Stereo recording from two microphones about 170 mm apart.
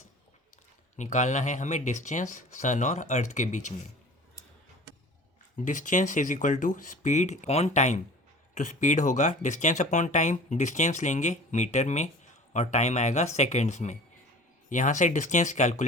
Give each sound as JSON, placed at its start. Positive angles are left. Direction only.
{"t": 0.9, "sound": "speech", "side_deg": 45}
{"t": 5.5, "sound": "speech", "side_deg": 50}